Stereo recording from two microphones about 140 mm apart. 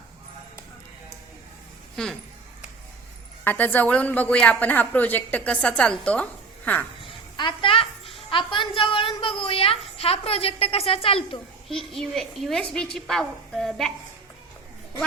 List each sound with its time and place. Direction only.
2.0 s a woman's voice: 5° left (ahead or behind)
3.4 s a woman's voice: 15° left (ahead or behind)
7.0 s a sound: 35° left (ahead or behind)
11.9 s a woman's voice: 5° left (ahead or behind)